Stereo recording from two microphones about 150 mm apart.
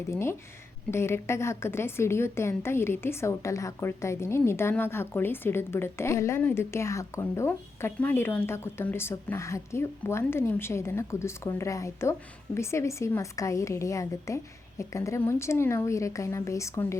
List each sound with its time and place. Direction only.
0.1 s a woman's voice: 20° left (ahead or behind)